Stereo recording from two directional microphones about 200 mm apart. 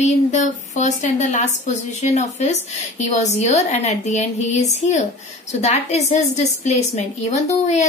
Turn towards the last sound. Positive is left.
turn(degrees=35)  # may be behind; listen again after turning